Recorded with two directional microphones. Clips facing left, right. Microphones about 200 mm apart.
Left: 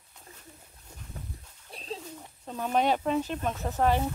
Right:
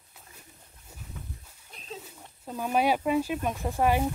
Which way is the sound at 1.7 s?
35° left (ahead or behind).